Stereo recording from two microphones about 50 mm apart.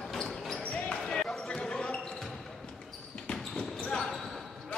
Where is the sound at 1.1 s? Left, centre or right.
Centre.